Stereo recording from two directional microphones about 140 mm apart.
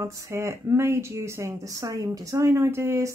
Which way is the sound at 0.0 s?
20° right (ahead or behind).